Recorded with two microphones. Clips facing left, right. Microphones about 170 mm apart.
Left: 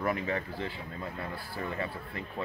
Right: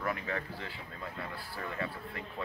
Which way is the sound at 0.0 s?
20° left (ahead or behind).